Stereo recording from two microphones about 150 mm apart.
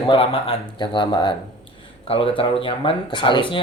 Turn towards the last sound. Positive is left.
turn(degrees=35)  # may be behind; listen again after turning